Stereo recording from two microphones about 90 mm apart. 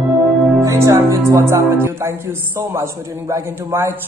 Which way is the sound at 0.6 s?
35° right (ahead or behind).